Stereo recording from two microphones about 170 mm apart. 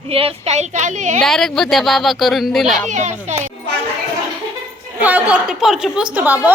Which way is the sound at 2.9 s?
45° right (ahead or behind).